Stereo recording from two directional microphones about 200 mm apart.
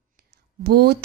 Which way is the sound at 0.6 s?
50° right (ahead or behind).